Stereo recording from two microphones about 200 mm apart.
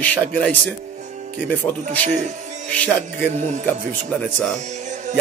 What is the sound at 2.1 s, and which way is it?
Speech, 35° right (ahead or behind).